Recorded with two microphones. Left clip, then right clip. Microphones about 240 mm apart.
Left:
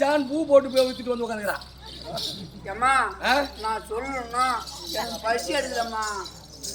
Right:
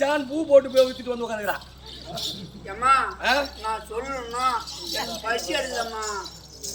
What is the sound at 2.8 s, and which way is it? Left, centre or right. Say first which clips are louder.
A man's voice: right 1 dB; centre.